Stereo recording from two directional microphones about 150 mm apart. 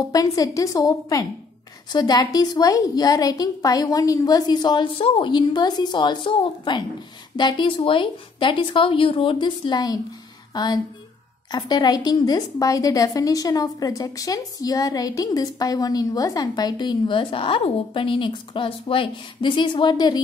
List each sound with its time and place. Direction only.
0.1 s a woman's voice: 25° left (ahead or behind)